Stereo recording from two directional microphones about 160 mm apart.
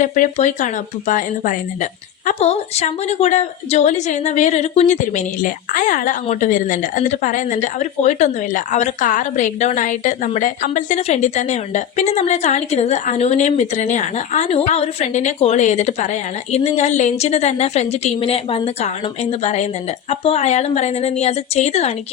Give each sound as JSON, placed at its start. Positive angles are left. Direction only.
{"t": 0.0, "sound": "a woman's voice", "side_deg": 55}